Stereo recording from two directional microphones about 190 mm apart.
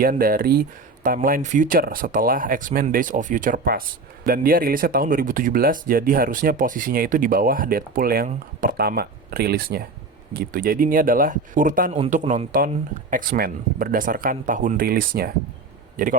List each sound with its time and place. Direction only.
0.0 s speech: 50° right (ahead or behind)